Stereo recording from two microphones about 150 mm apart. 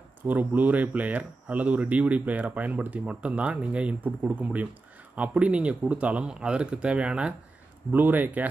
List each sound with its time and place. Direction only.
0.3 s speech: 10° right (ahead or behind)